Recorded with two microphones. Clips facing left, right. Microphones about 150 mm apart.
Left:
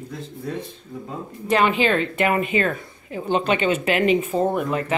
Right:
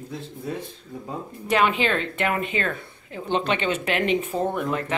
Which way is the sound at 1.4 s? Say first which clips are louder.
Left 3 dB; centre (ahead or behind).